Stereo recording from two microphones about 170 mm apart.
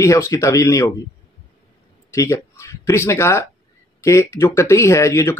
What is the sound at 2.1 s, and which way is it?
Speech, 15° left (ahead or behind).